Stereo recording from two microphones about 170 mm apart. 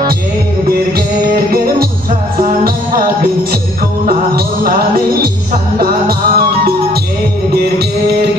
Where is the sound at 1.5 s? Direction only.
60° right (ahead or behind).